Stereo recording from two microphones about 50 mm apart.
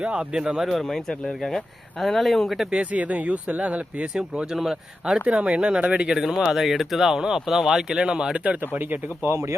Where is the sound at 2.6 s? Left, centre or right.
Right.